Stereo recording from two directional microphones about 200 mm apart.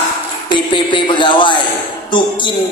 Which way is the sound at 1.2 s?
25° left (ahead or behind).